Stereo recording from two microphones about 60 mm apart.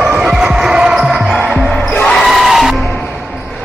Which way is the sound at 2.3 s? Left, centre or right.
Centre.